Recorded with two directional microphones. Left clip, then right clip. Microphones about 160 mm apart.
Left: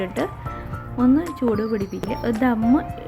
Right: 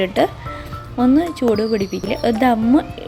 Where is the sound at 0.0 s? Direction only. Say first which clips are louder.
Right 8 dB; 20° right (ahead or behind).